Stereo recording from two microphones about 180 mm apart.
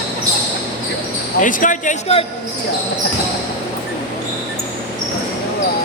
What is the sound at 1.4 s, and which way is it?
Speech, 45° left (ahead or behind).